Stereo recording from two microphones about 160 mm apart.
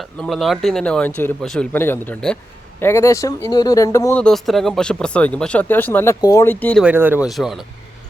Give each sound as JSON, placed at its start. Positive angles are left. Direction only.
{"t": 0.2, "sound": "speech", "side_deg": 0}
{"t": 4.2, "sound": "speech", "side_deg": 0}
{"t": 6.8, "sound": "speech", "side_deg": -10}
{"t": 7.3, "sound": "speech", "side_deg": 0}